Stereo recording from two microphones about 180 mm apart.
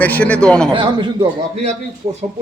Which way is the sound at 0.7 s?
25° right (ahead or behind).